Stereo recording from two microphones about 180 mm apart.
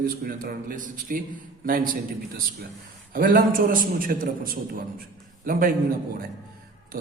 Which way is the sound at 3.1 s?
55° right (ahead or behind).